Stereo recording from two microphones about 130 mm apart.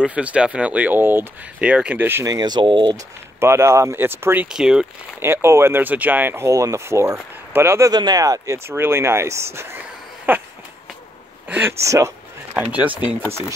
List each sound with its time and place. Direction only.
0.0 s speech: 10° right (ahead or behind)
2.2 s speech: 30° right (ahead or behind)
3.3 s speech: 20° right (ahead or behind)
5.2 s speech: 20° right (ahead or behind)
7.9 s speech: 30° right (ahead or behind)